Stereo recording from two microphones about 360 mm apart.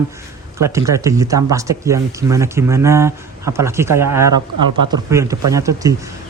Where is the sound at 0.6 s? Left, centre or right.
Centre.